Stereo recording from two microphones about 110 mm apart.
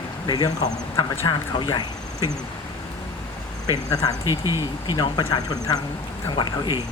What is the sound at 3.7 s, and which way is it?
Speech, 35° left (ahead or behind).